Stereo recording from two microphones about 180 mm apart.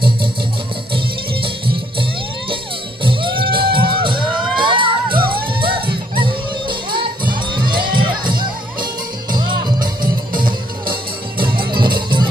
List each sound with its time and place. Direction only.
3.0 s music: 30° right (ahead or behind)
5.1 s music: 55° right (ahead or behind)
5.5 s music: 30° right (ahead or behind)